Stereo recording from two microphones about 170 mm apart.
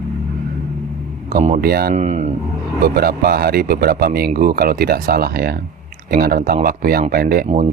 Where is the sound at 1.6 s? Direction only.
65° right (ahead or behind).